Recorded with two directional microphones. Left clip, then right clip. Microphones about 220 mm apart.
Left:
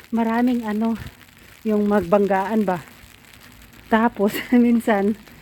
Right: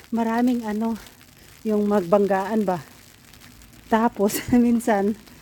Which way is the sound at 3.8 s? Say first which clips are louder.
Left 2 dB; 20° right (ahead or behind).